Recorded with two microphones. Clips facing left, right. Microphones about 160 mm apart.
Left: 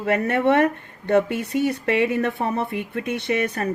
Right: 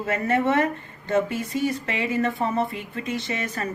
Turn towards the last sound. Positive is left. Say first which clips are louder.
# left 5 dB
turn(degrees=60)  # may be behind; listen again after turning